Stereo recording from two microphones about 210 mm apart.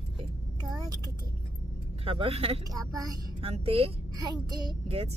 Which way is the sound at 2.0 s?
25° right (ahead or behind).